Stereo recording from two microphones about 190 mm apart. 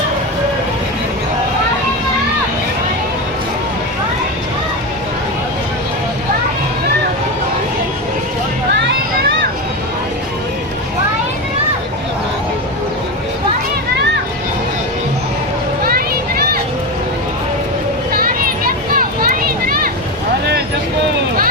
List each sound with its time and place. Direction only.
8.7 s vehicle: 65° right (ahead or behind)
15.8 s a sound: 50° right (ahead or behind)
18.1 s children playing: 50° right (ahead or behind)